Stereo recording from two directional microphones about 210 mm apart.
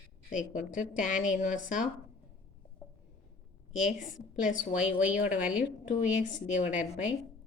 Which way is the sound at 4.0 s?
40° left (ahead or behind).